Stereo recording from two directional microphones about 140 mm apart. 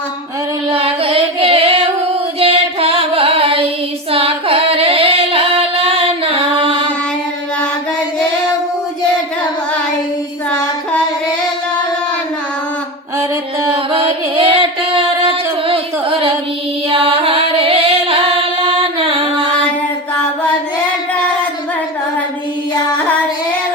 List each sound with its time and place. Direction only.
0.7 s music: 40° right (ahead or behind)
4.1 s singing: 40° right (ahead or behind)
13.7 s music: 40° right (ahead or behind)
16.9 s music: 40° right (ahead or behind)